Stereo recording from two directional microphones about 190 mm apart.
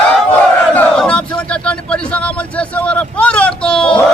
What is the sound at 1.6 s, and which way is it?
Speech, 5° left (ahead or behind).